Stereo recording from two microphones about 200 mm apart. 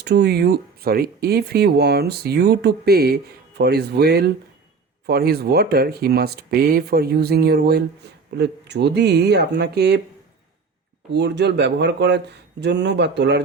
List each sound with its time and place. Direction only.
0.0 s speech: 55° right (ahead or behind)
11.1 s speech: 60° right (ahead or behind)